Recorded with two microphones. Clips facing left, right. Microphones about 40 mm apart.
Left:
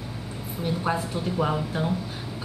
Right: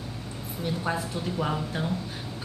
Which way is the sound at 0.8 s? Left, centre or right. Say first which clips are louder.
Left 4 dB; centre.